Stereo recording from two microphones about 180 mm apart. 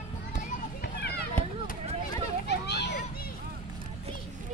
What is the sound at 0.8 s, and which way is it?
Children playing, 65° left (ahead or behind).